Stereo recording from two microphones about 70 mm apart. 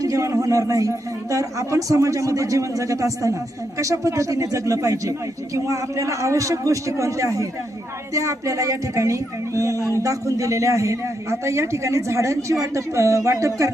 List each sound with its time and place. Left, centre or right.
0.0 s a man's voice: right